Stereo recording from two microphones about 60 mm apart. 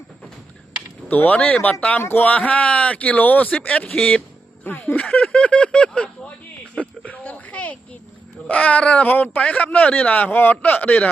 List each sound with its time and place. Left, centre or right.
1.0 s speech: left
6.7 s a sound: left
8.4 s speech: left